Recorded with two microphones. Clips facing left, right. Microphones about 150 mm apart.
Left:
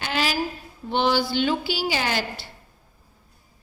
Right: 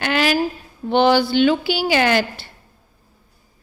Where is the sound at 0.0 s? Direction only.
65° right (ahead or behind).